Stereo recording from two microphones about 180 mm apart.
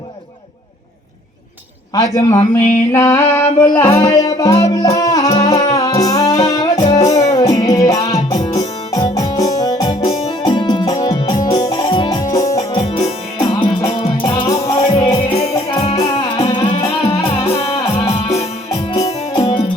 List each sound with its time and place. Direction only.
2.0 s a sound: 15° left (ahead or behind)
5.5 s music: 25° left (ahead or behind)
6.7 s music: 35° left (ahead or behind)
7.2 s music: 20° left (ahead or behind)
9.9 s music: 30° left (ahead or behind)
14.0 s music: 30° left (ahead or behind)
18.9 s music: 25° left (ahead or behind)